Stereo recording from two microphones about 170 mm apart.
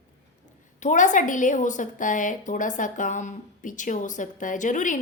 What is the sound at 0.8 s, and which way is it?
A woman's voice, 45° left (ahead or behind).